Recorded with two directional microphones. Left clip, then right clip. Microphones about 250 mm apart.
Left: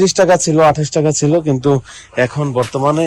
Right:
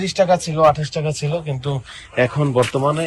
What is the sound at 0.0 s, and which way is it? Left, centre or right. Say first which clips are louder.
Speech: left 6 dB; left.